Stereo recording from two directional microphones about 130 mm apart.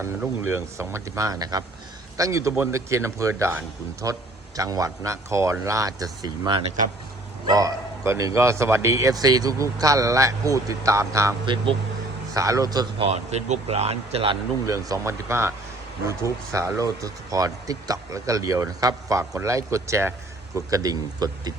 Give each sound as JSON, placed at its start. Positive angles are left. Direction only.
{"t": 0.0, "sound": "speech", "side_deg": -20}
{"t": 11.4, "sound": "a man's voice", "side_deg": -40}
{"t": 12.3, "sound": "speech", "side_deg": -25}
{"t": 13.1, "sound": "a man's voice", "side_deg": -55}
{"t": 14.7, "sound": "speech", "side_deg": -20}